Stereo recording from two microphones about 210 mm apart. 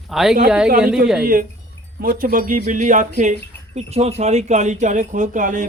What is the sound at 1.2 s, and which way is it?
Speech, 45° right (ahead or behind).